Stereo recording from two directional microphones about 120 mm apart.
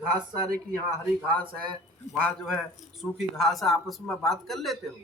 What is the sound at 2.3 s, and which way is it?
A man's voice, 5° left (ahead or behind).